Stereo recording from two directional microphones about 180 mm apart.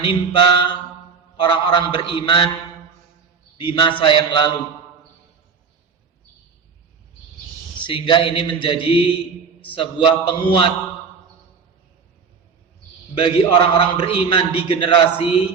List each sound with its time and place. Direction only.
0.0 s a man's voice: 25° left (ahead or behind)
3.6 s a man's voice: 25° left (ahead or behind)
7.8 s a man's voice: 25° left (ahead or behind)
13.1 s a man's voice: 30° left (ahead or behind)